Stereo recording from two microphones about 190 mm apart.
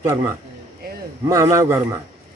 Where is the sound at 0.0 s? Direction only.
15° right (ahead or behind).